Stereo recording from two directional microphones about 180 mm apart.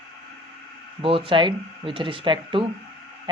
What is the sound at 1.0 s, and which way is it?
Speech, 30° right (ahead or behind).